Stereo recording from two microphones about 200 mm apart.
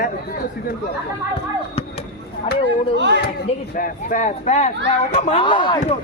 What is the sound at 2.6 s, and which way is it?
Speech, 60° right (ahead or behind).